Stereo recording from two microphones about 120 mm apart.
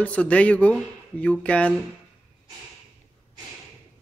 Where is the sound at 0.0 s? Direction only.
10° left (ahead or behind).